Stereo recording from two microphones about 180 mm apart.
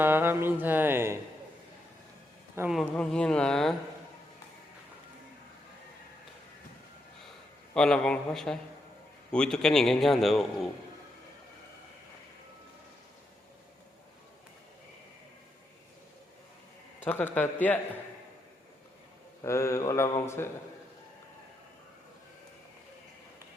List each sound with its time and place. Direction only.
0.0 s music: 10° right (ahead or behind)
2.6 s a man's voice: centre (ahead or behind)
7.7 s a man's voice: 5° left (ahead or behind)
17.3 s speech: 10° left (ahead or behind)
19.4 s speech: 15° left (ahead or behind)